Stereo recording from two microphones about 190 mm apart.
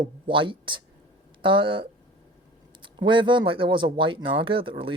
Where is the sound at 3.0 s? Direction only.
25° right (ahead or behind).